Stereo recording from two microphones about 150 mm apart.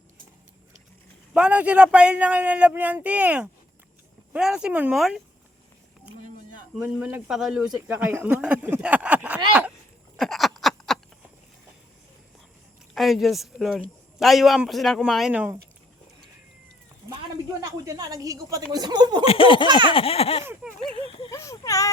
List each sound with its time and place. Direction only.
1.3 s a man's voice: 10° right (ahead or behind)
6.7 s speech: 10° right (ahead or behind)
10.2 s a sound: centre (ahead or behind)
12.9 s a man's voice: centre (ahead or behind)
17.6 s a woman's voice: 25° right (ahead or behind)
19.2 s baby laughter: 40° left (ahead or behind)
20.9 s a sound: 35° left (ahead or behind)
21.2 s speech: 20° left (ahead or behind)